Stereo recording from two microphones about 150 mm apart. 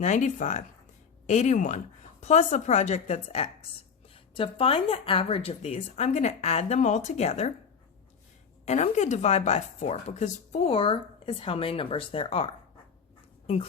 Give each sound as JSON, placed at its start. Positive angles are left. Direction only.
{"t": 0.0, "sound": "a woman's voice", "side_deg": 55}
{"t": 8.6, "sound": "speech", "side_deg": 50}